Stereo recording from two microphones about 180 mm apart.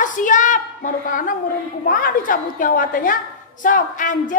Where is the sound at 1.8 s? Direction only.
50° left (ahead or behind).